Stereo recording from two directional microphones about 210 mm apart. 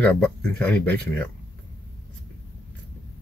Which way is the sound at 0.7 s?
10° left (ahead or behind).